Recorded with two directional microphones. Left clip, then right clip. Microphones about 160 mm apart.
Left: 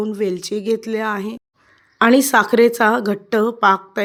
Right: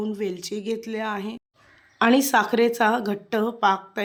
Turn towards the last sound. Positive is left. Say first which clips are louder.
# left 6 dB
turn(degrees=30)  # may be behind; listen again after turning